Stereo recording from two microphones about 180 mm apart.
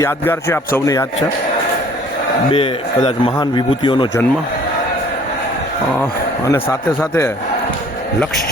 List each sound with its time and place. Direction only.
0.0 s speech: 15° left (ahead or behind)
2.5 s a man's voice: 30° left (ahead or behind)
6.0 s speech: 15° left (ahead or behind)